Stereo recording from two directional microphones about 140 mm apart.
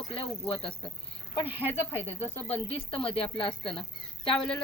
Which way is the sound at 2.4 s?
45° left (ahead or behind).